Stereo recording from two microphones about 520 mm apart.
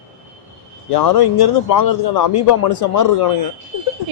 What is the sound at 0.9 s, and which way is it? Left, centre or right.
Speech, left.